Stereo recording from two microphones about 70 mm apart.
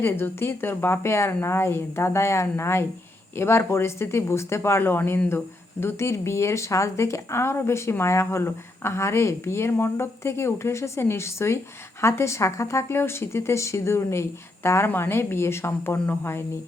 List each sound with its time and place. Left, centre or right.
0.0 s a woman's voice: left